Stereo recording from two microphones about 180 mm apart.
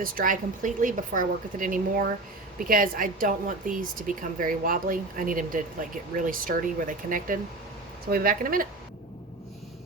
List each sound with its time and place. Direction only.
0.0 s a woman's voice: 50° right (ahead or behind)